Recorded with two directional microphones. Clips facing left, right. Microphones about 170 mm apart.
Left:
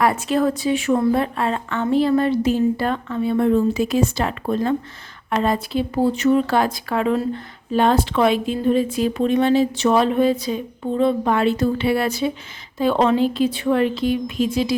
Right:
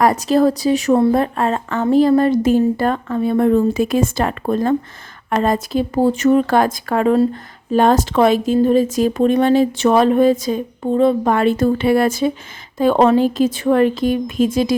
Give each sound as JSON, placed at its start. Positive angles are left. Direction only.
{"t": 0.0, "sound": "speech", "side_deg": -40}